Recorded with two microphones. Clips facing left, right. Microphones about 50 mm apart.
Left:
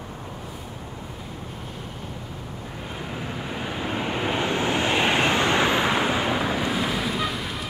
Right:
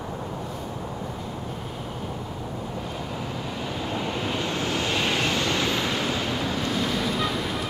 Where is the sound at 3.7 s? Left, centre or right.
Left; by 7.6 s centre.